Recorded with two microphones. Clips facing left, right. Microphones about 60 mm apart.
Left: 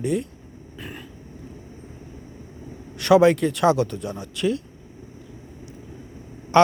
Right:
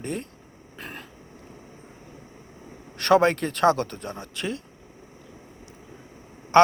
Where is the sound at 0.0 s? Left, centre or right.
Right.